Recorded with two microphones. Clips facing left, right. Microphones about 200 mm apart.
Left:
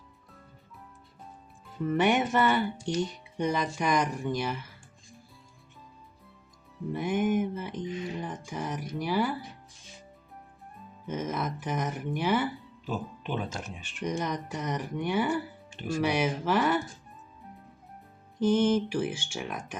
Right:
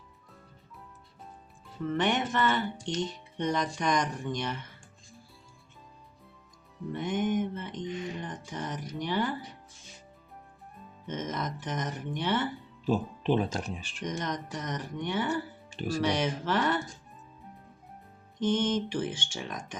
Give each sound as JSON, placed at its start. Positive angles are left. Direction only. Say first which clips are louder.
{"t": 1.9, "sound": "speech", "louder": "left 4 dB", "side_deg": 10}
{"t": 6.9, "sound": "music", "louder": "left 2 dB", "side_deg": 10}
{"t": 11.0, "sound": "speech", "louder": "left 2 dB", "side_deg": 10}
{"t": 12.8, "sound": "speech", "louder": "right 6 dB", "side_deg": -30}
{"t": 14.0, "sound": "speech", "louder": "left 3 dB", "side_deg": 10}
{"t": 18.3, "sound": "speech", "louder": "left 4 dB", "side_deg": 10}